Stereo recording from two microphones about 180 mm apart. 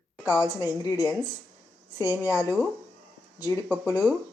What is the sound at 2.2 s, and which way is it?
Speech, 10° right (ahead or behind).